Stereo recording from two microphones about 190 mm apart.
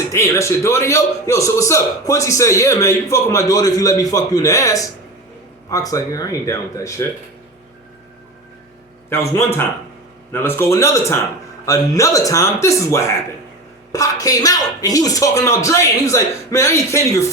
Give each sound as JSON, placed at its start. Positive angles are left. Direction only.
{"t": 0.1, "sound": "a man's voice", "side_deg": 15}
{"t": 9.0, "sound": "a man's voice", "side_deg": 10}